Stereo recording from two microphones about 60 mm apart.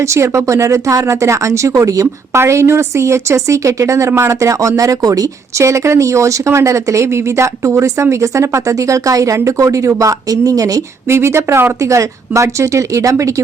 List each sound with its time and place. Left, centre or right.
0.0 s speech: right
2.3 s a woman's voice: right
4.8 s speech: right
5.6 s speech: right
11.1 s a woman's voice: right
11.8 s speech: right